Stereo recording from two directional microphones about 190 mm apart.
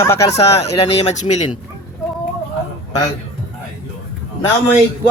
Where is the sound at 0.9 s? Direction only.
35° left (ahead or behind).